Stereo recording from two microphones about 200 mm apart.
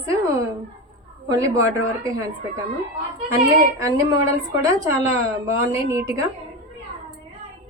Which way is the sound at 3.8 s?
15° right (ahead or behind).